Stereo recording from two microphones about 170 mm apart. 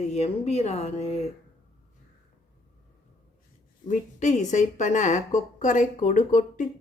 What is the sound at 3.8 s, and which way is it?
A woman's voice, 45° left (ahead or behind).